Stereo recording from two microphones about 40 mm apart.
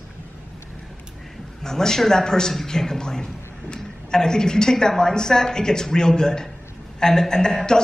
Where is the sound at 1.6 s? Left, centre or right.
Centre.